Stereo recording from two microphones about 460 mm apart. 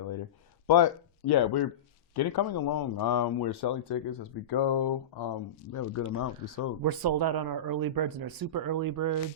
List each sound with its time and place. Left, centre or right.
0.7 s speech: left
5.7 s speech: left
6.8 s speech: right